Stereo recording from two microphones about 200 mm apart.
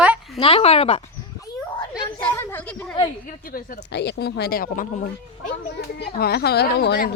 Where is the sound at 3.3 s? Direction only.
45° left (ahead or behind).